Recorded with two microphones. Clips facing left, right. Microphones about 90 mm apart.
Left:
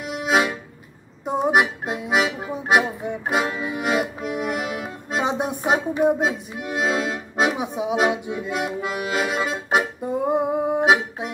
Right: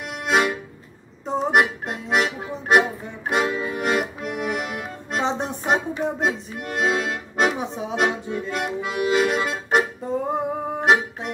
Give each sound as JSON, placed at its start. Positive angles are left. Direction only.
{"t": 0.0, "sound": "music", "side_deg": 0}
{"t": 1.2, "sound": "accordion", "side_deg": 10}
{"t": 10.3, "sound": "music", "side_deg": 15}